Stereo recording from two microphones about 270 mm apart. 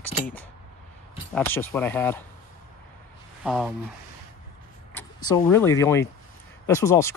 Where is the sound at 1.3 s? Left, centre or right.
Centre.